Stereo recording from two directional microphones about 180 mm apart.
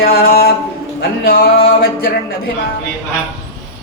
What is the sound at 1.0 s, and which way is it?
Speech, 55° left (ahead or behind).